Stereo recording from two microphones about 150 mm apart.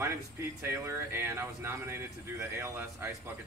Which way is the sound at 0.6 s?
20° right (ahead or behind).